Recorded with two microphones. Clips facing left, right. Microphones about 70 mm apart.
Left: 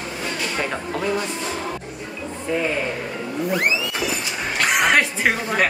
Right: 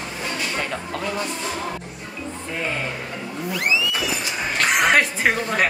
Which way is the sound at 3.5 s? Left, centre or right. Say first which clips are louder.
Left 1 dB; left.